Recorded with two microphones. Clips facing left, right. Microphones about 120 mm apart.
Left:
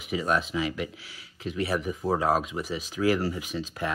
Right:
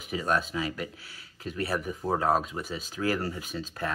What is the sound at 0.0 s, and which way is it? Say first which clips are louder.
Speech: left 2 dB; 40° right (ahead or behind).